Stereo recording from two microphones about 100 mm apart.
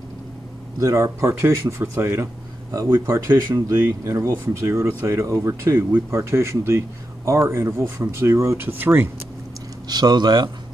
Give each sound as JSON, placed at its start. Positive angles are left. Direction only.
{"t": 0.7, "sound": "speech", "side_deg": -30}
{"t": 9.8, "sound": "speech", "side_deg": -45}